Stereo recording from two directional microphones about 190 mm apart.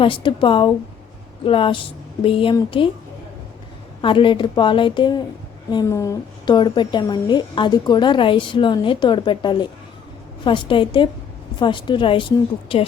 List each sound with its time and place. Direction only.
0.0 s a woman's voice: 25° left (ahead or behind)
4.0 s a woman's voice: 25° left (ahead or behind)